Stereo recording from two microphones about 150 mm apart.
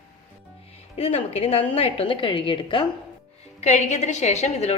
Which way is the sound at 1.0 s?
40° left (ahead or behind).